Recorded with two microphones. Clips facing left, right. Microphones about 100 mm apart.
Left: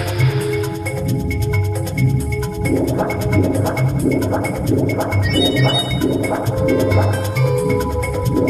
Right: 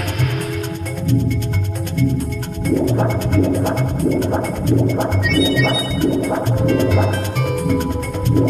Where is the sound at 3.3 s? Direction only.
Centre (ahead or behind).